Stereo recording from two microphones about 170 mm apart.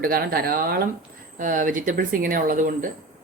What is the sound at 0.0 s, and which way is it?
Speech, 60° right (ahead or behind).